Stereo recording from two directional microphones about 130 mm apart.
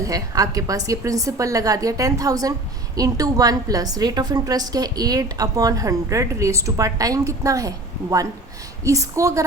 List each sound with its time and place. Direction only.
0.0 s a woman's voice: 30° right (ahead or behind)
8.8 s a woman's voice: 25° right (ahead or behind)